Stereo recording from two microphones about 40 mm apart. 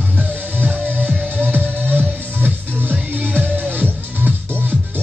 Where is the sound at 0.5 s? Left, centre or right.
Right.